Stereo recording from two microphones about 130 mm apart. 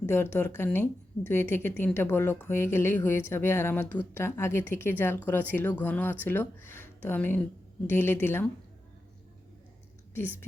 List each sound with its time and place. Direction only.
0.0 s a woman's voice: 20° left (ahead or behind)
10.2 s a woman's voice: 20° left (ahead or behind)